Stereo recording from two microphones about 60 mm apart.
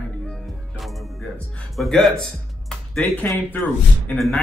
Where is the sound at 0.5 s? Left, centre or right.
Centre.